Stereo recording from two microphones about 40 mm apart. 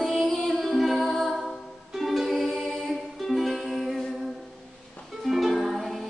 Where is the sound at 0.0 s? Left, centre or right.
Centre.